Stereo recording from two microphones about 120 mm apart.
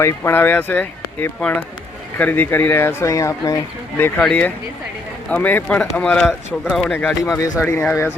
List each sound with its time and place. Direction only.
0.0 s speech: 20° left (ahead or behind)
3.9 s speech: 10° left (ahead or behind)
7.3 s speech: 30° left (ahead or behind)